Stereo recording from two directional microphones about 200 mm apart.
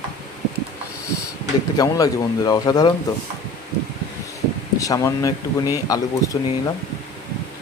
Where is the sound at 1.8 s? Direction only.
20° left (ahead or behind).